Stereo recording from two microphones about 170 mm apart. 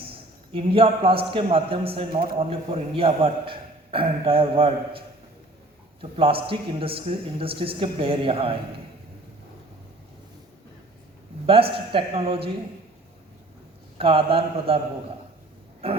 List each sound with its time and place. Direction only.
0.0 s a man's voice: 30° right (ahead or behind)
6.0 s a man's voice: 35° right (ahead or behind)
11.4 s a man's voice: 35° right (ahead or behind)
14.0 s a man's voice: 35° right (ahead or behind)
15.8 s a man's voice: 35° right (ahead or behind)